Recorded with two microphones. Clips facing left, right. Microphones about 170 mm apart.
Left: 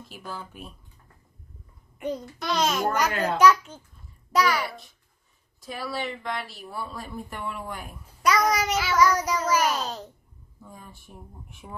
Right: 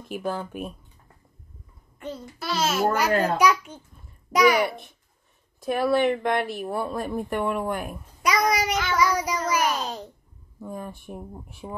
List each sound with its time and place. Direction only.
0.1 s speech: 55° right (ahead or behind)
2.0 s a child's voice: 15° left (ahead or behind)
2.3 s a child's voice: 5° right (ahead or behind)
5.6 s speech: 55° right (ahead or behind)
8.2 s babbling: 10° right (ahead or behind)
8.9 s a child's voice: 10° right (ahead or behind)
10.6 s speech: 55° right (ahead or behind)
11.6 s a child's voice: 15° right (ahead or behind)